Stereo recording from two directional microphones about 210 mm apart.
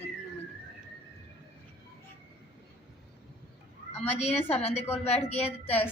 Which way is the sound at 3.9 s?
30° left (ahead or behind).